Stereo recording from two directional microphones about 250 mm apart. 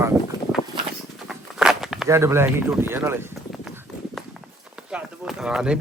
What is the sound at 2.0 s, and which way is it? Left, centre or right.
Speech, centre.